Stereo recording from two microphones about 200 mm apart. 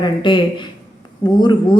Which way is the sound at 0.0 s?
25° left (ahead or behind).